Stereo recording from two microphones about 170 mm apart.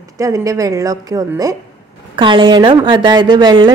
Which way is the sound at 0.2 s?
20° right (ahead or behind).